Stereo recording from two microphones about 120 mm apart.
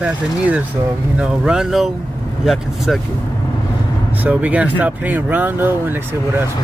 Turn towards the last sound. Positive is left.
turn(degrees=-20)  # may be behind; listen again after turning